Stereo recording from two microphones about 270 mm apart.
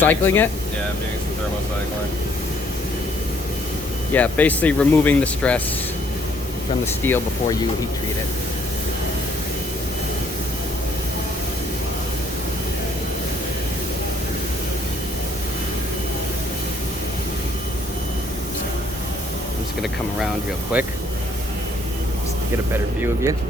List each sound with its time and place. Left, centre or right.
0.0 s speech: centre
4.1 s speech: centre
6.8 s speech: centre
20.7 s speech: centre
22.7 s speech: centre